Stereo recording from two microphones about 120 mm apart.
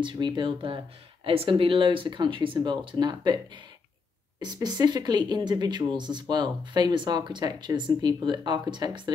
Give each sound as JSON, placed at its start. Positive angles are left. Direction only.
{"t": 0.0, "sound": "speech", "side_deg": -40}
{"t": 4.4, "sound": "speech", "side_deg": -35}